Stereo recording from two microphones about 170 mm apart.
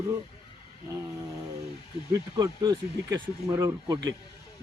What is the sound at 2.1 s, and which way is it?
Speech, 20° right (ahead or behind).